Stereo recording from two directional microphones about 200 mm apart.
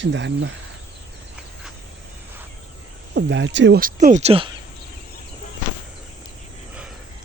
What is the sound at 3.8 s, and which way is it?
Speech, 45° right (ahead or behind).